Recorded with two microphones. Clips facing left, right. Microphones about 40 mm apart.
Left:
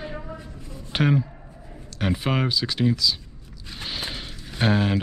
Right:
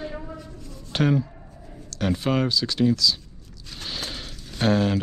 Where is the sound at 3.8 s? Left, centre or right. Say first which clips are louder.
Left 1 dB; centre.